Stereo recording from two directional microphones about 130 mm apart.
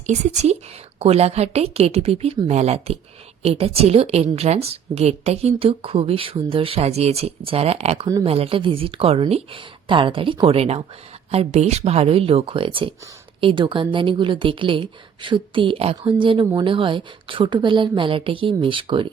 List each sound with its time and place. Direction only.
0.9 s a woman's voice: 50° right (ahead or behind)